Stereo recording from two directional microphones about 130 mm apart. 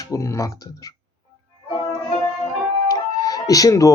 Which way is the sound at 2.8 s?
30° left (ahead or behind).